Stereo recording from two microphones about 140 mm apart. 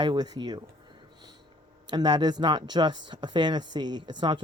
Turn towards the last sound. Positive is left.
turn(degrees=-35)  # may be behind; listen again after turning